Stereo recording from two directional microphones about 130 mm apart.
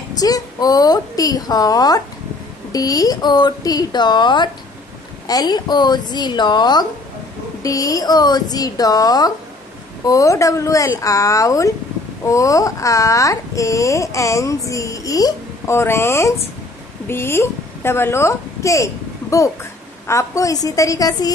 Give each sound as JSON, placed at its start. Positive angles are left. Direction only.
{"t": 0.2, "sound": "a woman's voice", "side_deg": 30}